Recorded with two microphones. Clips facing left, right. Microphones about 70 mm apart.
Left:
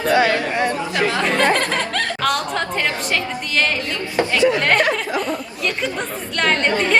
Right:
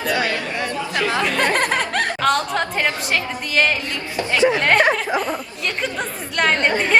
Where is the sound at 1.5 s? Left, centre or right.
Right.